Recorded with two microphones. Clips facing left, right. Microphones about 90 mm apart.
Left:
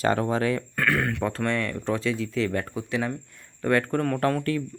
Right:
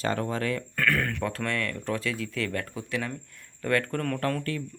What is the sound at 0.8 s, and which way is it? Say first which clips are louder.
Speech: left 2 dB; 15° left (ahead or behind).